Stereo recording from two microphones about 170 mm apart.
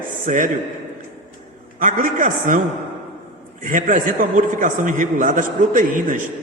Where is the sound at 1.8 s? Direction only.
50° right (ahead or behind).